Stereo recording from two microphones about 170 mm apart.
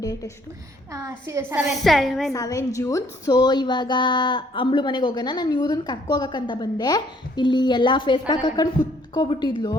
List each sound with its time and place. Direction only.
0.0 s a woman's voice: 20° left (ahead or behind)
0.9 s a woman's voice: 20° right (ahead or behind)
1.7 s a woman's voice: centre (ahead or behind)
2.3 s a woman's voice: 20° left (ahead or behind)